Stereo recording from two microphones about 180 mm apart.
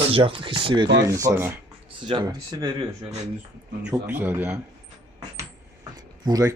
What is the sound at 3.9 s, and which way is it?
Speech, 10° right (ahead or behind).